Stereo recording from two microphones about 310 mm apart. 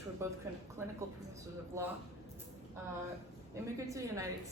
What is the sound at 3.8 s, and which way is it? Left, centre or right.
Speech, centre.